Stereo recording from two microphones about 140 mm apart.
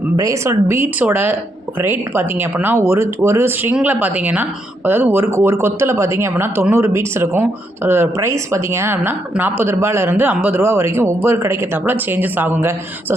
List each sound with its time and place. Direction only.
0.2 s speech: 20° right (ahead or behind)